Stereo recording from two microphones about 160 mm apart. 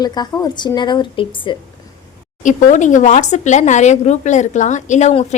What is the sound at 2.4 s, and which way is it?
Speech, 55° left (ahead or behind).